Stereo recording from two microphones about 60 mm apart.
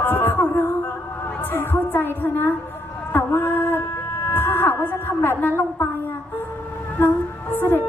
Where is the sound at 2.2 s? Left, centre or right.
Left.